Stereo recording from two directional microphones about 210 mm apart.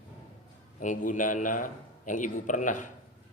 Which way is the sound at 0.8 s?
35° left (ahead or behind).